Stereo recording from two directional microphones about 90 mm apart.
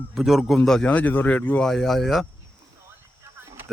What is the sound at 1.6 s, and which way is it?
Speech, 5° left (ahead or behind).